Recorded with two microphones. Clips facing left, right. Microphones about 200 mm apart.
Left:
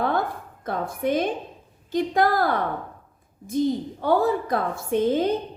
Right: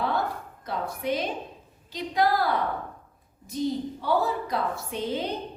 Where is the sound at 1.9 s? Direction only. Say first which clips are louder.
Left 4 dB; 50° left (ahead or behind).